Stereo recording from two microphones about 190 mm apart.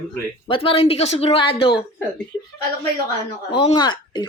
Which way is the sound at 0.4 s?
30° left (ahead or behind).